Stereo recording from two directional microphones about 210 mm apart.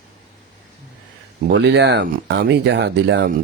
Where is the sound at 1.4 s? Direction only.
55° right (ahead or behind).